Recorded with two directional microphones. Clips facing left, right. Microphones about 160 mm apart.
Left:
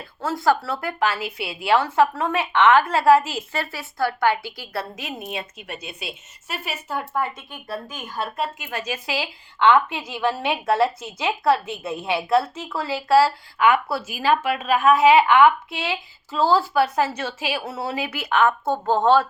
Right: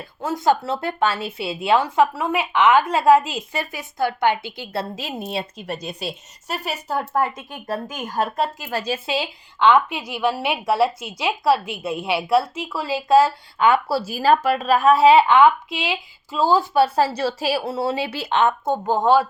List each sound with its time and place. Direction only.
0.2 s a woman's voice: 20° right (ahead or behind)
16.8 s a woman's voice: 30° right (ahead or behind); by 19.3 s 10° right (ahead or behind)